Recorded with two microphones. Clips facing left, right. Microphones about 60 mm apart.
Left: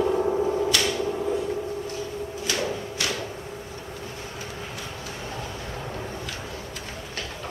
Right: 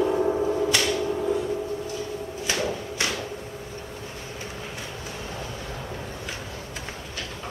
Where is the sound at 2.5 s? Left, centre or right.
Right.